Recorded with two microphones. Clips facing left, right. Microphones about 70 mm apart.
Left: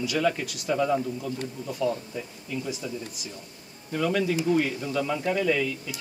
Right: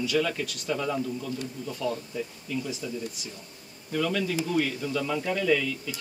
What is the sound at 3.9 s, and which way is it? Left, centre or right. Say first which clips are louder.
Speech: left 2 dB; centre.